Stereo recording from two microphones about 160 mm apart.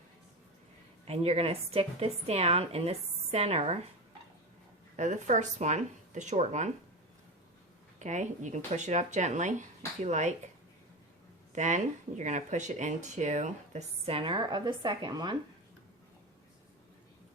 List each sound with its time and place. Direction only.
1.0 s a woman's voice: 40° right (ahead or behind)
4.9 s speech: 50° right (ahead or behind)
7.9 s speech: 50° right (ahead or behind)
11.5 s speech: 50° right (ahead or behind); by 15.4 s 30° right (ahead or behind)